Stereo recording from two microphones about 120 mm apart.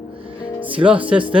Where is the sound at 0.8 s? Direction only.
45° right (ahead or behind).